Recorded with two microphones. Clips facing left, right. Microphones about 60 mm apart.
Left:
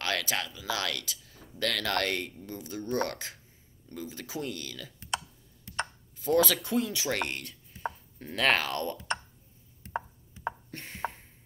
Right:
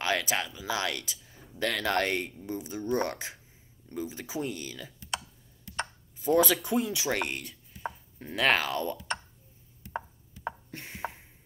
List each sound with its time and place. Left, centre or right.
0.0 s speech: centre
6.1 s chopping: centre
9.9 s chopping: centre